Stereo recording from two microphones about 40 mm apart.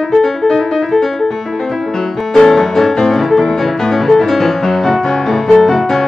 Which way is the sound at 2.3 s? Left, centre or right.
Centre.